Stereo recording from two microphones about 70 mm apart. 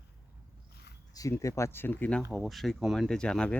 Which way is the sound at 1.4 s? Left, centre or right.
Left.